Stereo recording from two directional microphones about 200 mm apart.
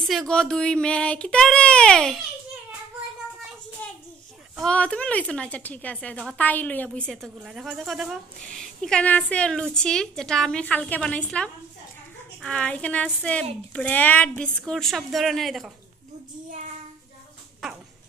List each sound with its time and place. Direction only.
0.0 s a woman's voice: centre (ahead or behind)
4.6 s a woman's voice: 5° left (ahead or behind)
17.6 s a woman's voice: centre (ahead or behind)